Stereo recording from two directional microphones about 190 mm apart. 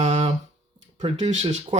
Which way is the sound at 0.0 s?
35° right (ahead or behind).